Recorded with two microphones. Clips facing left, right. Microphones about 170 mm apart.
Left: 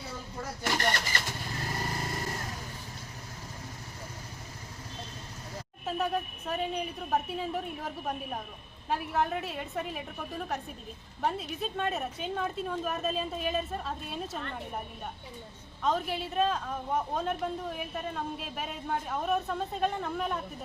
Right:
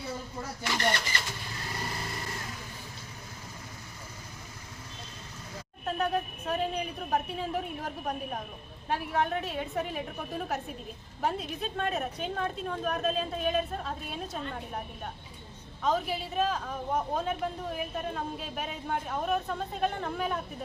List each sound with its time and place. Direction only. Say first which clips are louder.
0.6 s speech: even; 45° left (ahead or behind)
5.8 s a woman's voice: right 1 dB; centre (ahead or behind)
15.8 s a woman's voice: right 1 dB; centre (ahead or behind)